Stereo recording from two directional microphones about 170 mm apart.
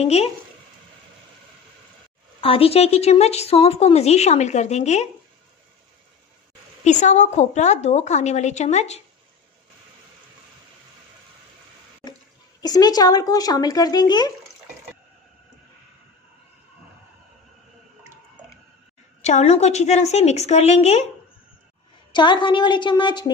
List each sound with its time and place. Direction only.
0.0 s speech: 40° left (ahead or behind)
2.4 s speech: 35° left (ahead or behind)
6.8 s a woman's voice: 45° left (ahead or behind)
12.6 s speech: 20° left (ahead or behind)
19.2 s speech: 40° left (ahead or behind)
22.1 s speech: 30° left (ahead or behind)